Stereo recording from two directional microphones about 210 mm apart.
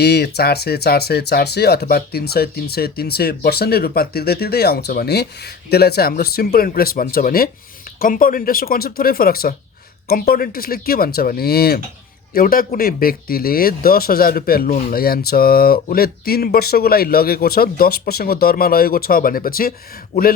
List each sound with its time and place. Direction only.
0.0 s speech: 50° left (ahead or behind)